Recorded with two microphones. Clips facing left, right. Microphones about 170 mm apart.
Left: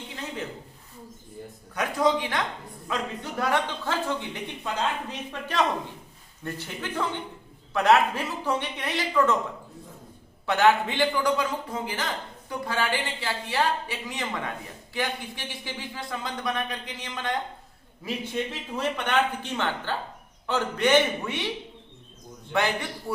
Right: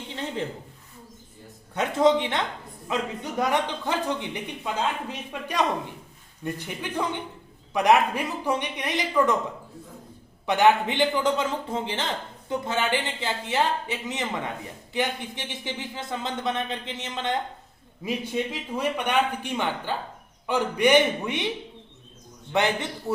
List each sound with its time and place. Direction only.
0.1 s a sound: 30° right (ahead or behind)
1.7 s a man's voice: 25° right (ahead or behind)
10.4 s a man's voice: 15° right (ahead or behind)
18.0 s a man's voice: 10° right (ahead or behind)
22.5 s a man's voice: 20° right (ahead or behind)